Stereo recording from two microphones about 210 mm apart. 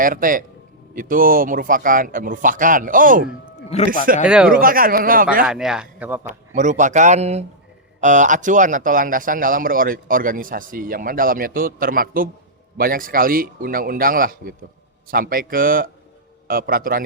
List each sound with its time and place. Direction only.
0.0 s a man's voice: 40° right (ahead or behind)
3.7 s a man's voice: 30° left (ahead or behind)
4.3 s a man's voice: 5° right (ahead or behind)
4.5 s a man's voice: 45° right (ahead or behind)
5.5 s a man's voice: 5° right (ahead or behind)
6.2 s a man's voice: 35° right (ahead or behind)